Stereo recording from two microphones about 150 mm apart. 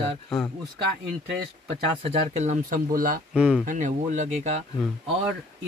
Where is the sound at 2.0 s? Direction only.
45° right (ahead or behind); by 3.2 s 70° right (ahead or behind).